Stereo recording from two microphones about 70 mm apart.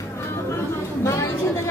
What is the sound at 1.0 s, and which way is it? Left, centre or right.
Speech, left.